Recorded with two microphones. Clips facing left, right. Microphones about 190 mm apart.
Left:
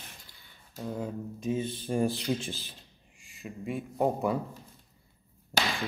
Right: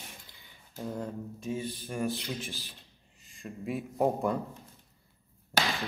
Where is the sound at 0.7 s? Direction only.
Centre (ahead or behind).